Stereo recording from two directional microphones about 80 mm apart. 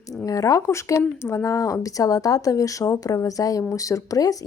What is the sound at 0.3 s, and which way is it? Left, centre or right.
Speech, left.